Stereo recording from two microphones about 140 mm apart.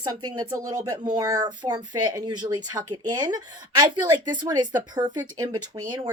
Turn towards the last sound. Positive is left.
turn(degrees=-30)  # may be behind; listen again after turning